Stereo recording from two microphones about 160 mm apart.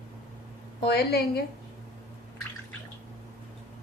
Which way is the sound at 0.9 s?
85° left.